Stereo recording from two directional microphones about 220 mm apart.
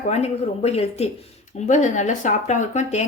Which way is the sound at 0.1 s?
30° left (ahead or behind).